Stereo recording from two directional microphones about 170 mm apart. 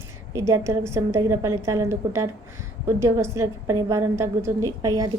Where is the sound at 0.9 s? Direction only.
15° right (ahead or behind).